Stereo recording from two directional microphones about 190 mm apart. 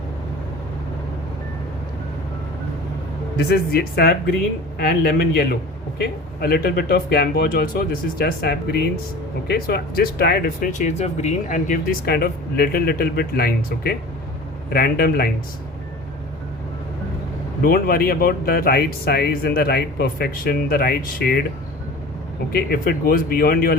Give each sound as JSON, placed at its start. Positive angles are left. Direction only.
{"t": 3.3, "sound": "speech", "side_deg": 55}
{"t": 17.6, "sound": "speech", "side_deg": 50}
{"t": 22.5, "sound": "speech", "side_deg": 50}